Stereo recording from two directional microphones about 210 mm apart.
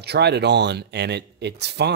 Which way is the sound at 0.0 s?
50° right (ahead or behind).